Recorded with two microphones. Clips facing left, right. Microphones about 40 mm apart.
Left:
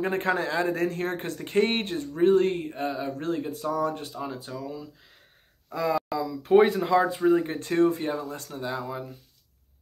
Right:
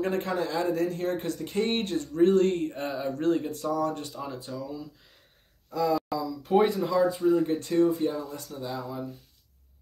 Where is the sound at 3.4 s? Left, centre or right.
Centre.